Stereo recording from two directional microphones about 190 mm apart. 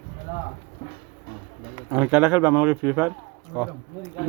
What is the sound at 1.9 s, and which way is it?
Speech, 10° right (ahead or behind).